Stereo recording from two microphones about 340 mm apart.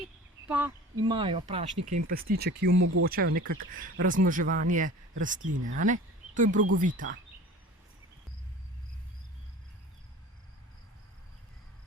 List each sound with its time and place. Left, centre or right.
0.4 s speech: centre; by 7.2 s right